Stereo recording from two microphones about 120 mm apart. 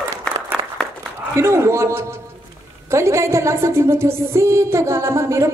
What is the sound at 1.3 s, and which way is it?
A woman's voice, 25° right (ahead or behind).